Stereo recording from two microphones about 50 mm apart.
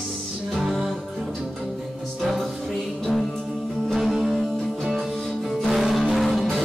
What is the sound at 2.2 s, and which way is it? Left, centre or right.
Music, centre.